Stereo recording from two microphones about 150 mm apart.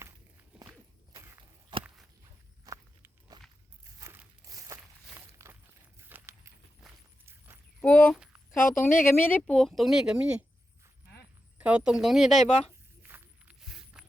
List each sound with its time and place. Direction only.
2.2 s walk: 20° right (ahead or behind)
7.8 s a sound: 10° left (ahead or behind)
8.4 s speech: 15° left (ahead or behind); by 10.4 s 5° right (ahead or behind)
11.5 s speech: 10° right (ahead or behind)
13.0 s walk: 10° right (ahead or behind)